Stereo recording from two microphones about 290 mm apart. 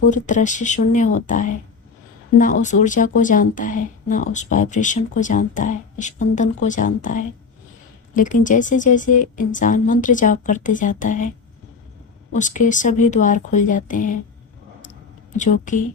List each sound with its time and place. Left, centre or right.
0.0 s speech: left
12.3 s speech: left
15.4 s speech: left